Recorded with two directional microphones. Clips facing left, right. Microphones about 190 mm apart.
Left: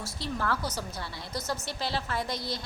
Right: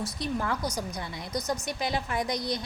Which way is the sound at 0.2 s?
15° right (ahead or behind).